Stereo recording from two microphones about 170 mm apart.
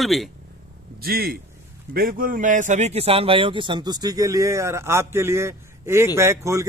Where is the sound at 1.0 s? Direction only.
60° right (ahead or behind).